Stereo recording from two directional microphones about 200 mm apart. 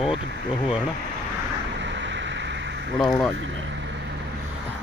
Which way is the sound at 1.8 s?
65° right (ahead or behind).